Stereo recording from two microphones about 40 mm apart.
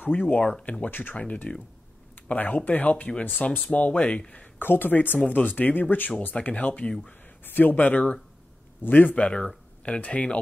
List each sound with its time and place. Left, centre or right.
0.0 s speech: left
0.8 s speech: left
1.1 s speech: left
2.2 s speech: left
4.6 s speech: left
5.3 s speech: left
6.5 s speech: left
7.4 s speech: left
9.1 s speech: left